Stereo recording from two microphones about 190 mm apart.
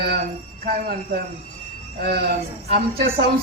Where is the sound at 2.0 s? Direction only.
55° right (ahead or behind).